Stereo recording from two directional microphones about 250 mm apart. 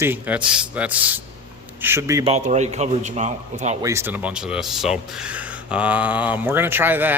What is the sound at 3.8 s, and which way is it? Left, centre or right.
Speech, centre.